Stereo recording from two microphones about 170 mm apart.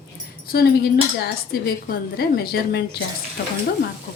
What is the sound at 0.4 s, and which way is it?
A woman's voice, 65° left (ahead or behind).